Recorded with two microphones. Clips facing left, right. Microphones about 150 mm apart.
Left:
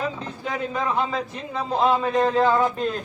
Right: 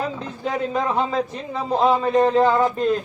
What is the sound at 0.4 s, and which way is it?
A man's voice, 25° right (ahead or behind).